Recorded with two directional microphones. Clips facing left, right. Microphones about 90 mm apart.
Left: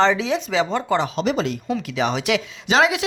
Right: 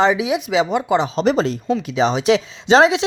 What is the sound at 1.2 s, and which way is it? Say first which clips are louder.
Chopping: right 4 dB; 35° right (ahead or behind).